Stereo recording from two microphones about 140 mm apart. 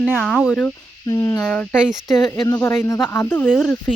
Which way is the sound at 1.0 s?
25° left (ahead or behind).